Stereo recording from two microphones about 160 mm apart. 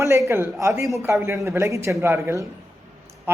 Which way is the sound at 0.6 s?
20° right (ahead or behind).